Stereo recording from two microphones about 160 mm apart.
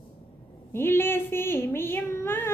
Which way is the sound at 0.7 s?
15° left (ahead or behind).